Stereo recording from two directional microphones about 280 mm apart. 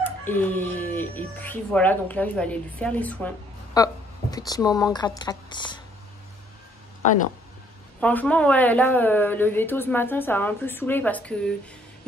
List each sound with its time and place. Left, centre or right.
0.0 s speech: centre
8.0 s speech: centre